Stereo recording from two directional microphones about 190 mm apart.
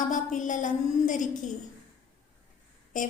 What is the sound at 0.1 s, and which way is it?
A woman's voice, 40° left (ahead or behind).